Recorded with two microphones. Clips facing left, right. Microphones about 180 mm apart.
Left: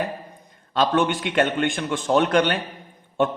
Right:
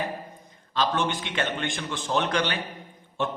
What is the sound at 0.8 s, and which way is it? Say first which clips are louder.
A man's voice: left 6 dB; 60° left (ahead or behind).